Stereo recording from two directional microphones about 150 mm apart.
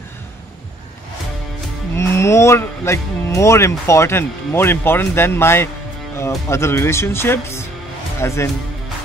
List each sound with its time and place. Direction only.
2.0 s speech: 20° left (ahead or behind)